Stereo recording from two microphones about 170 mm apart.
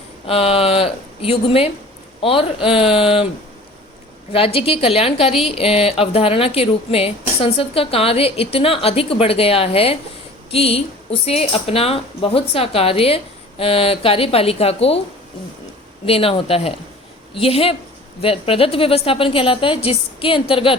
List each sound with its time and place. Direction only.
0.3 s a woman's voice: 35° left (ahead or behind)
4.3 s a woman's voice: 35° left (ahead or behind)
16.0 s a woman's voice: 35° left (ahead or behind)